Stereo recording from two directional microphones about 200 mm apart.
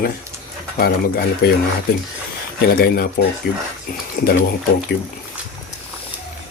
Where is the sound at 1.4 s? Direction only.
50° left (ahead or behind).